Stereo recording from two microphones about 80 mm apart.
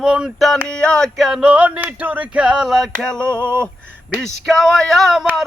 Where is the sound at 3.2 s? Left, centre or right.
Right.